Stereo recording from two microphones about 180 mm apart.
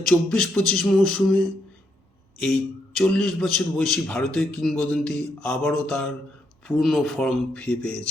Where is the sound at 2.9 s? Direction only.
5° left (ahead or behind).